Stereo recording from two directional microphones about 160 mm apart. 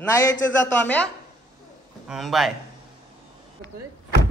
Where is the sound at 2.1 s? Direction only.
Centre (ahead or behind).